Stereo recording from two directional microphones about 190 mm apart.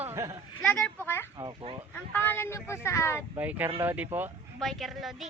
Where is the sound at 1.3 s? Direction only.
25° right (ahead or behind).